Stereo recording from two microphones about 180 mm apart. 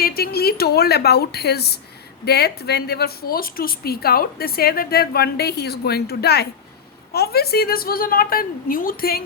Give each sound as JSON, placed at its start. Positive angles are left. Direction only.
{"t": 0.0, "sound": "a woman's voice", "side_deg": 60}